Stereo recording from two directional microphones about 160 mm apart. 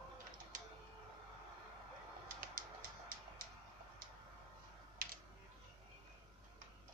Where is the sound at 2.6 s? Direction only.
65° right (ahead or behind).